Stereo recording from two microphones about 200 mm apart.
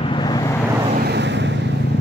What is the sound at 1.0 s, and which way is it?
Vehicle, 60° right (ahead or behind).